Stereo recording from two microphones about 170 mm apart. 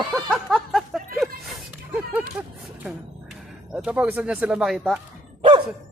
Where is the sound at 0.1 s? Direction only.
Centre (ahead or behind).